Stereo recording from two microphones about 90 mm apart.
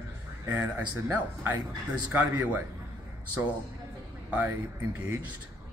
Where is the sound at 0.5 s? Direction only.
25° right (ahead or behind).